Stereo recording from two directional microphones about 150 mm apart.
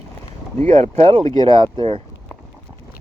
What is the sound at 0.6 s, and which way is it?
Speech, 50° right (ahead or behind).